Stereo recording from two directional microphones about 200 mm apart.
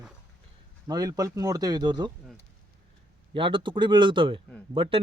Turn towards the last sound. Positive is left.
turn(degrees=-25)  # may be behind; listen again after turning